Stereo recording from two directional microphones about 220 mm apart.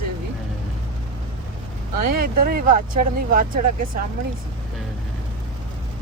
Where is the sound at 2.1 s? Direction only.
45° right (ahead or behind).